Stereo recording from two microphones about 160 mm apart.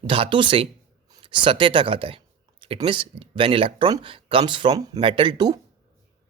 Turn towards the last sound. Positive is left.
turn(degrees=-25)  # may be behind; listen again after turning